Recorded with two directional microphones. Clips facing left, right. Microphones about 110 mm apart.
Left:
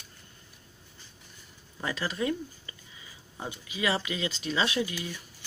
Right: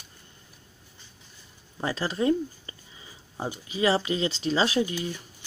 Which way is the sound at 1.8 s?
30° right (ahead or behind).